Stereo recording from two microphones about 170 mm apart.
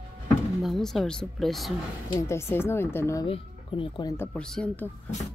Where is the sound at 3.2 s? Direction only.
30° left (ahead or behind).